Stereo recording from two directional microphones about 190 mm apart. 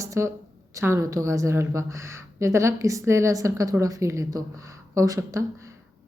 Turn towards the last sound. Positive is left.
turn(degrees=-15)  # may be behind; listen again after turning